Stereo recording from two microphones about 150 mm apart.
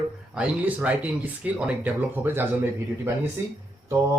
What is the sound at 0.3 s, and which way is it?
Speech, 10° right (ahead or behind).